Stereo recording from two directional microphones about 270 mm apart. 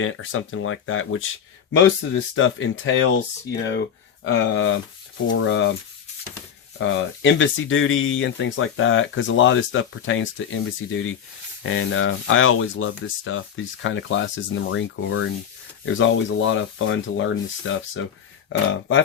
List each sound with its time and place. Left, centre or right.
0.0 s speech: left
4.2 s speech: left
6.7 s speech: left